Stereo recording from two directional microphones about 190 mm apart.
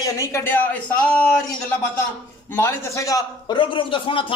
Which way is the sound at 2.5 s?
15° left (ahead or behind).